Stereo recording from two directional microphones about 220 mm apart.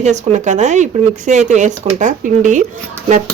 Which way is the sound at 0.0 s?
30° right (ahead or behind).